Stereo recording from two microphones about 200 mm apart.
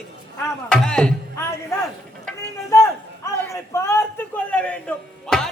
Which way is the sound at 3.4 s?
15° left (ahead or behind).